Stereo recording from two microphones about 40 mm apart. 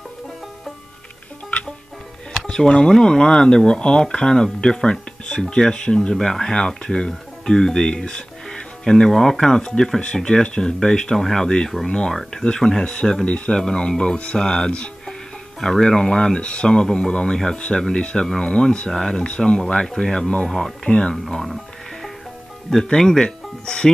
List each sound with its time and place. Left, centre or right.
2.3 s music: left
2.9 s speech: centre
6.1 s speech: centre
22.8 s speech: centre